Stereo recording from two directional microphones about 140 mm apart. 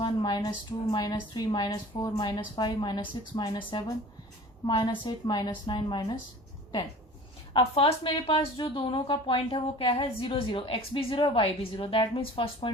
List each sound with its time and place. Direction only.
0.0 s a woman's voice: 30° left (ahead or behind)
7.5 s speech: 40° left (ahead or behind)